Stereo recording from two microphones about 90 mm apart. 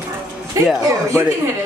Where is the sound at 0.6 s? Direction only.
35° right (ahead or behind).